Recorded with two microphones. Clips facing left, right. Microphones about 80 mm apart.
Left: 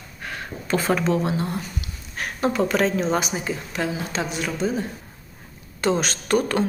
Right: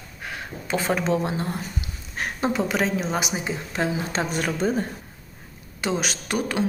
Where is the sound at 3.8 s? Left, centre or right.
Right.